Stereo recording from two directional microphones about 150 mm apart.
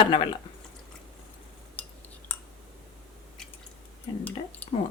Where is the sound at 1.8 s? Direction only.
10° left (ahead or behind).